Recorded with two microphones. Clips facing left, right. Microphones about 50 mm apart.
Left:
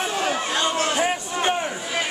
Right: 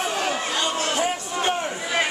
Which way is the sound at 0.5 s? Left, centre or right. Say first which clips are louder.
Left 2 dB; left.